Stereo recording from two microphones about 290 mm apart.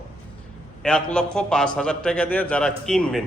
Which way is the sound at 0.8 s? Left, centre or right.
Centre.